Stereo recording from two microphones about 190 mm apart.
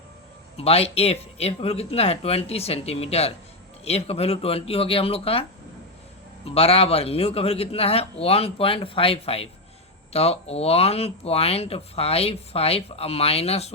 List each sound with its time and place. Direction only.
0.5 s speech: 30° left (ahead or behind)